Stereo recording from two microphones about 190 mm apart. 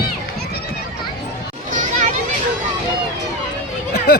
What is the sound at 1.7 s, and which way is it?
Children playing, 40° right (ahead or behind).